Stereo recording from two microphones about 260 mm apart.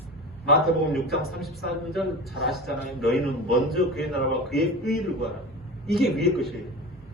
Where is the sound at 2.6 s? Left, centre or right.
Left.